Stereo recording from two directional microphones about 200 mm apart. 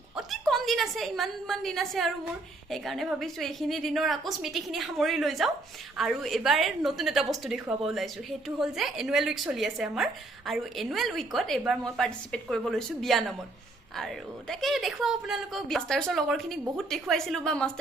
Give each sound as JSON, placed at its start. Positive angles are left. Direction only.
{"t": 0.2, "sound": "a woman's voice", "side_deg": 0}